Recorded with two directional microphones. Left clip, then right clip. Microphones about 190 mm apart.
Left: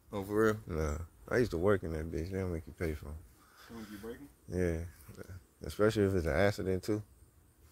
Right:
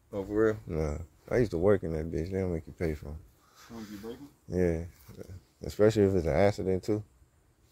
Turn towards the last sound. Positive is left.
turn(degrees=5)  # may be behind; listen again after turning